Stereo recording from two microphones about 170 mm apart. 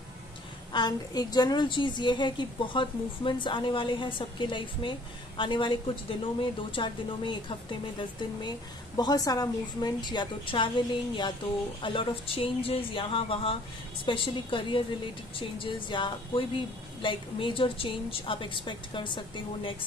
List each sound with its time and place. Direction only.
0.7 s a woman's voice: 25° left (ahead or behind)
11.8 s a woman's voice: 30° left (ahead or behind)